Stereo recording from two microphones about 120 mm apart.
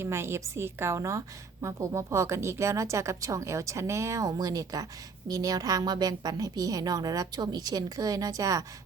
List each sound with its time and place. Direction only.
0.0 s a woman's voice: 20° right (ahead or behind)